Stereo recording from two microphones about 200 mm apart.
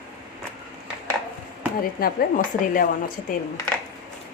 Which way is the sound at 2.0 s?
45° left (ahead or behind).